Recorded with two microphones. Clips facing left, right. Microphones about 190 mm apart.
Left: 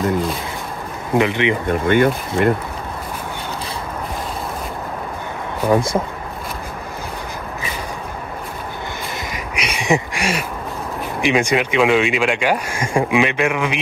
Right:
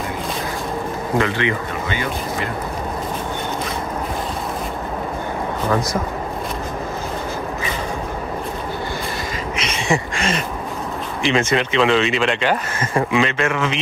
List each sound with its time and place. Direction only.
1.1 s speech: 15° left (ahead or behind)
1.7 s speech: 55° left (ahead or behind)
9.6 s a sound: 15° left (ahead or behind)
11.2 s speech: 15° left (ahead or behind)